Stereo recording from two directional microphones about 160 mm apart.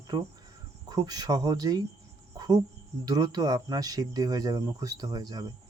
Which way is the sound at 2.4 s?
25° right (ahead or behind).